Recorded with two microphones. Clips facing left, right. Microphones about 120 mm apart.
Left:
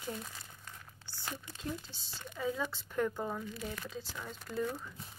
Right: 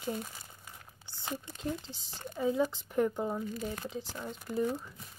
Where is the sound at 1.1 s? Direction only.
20° right (ahead or behind).